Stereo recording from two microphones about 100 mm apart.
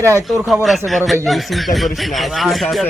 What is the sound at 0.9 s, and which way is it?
Speech, centre (ahead or behind).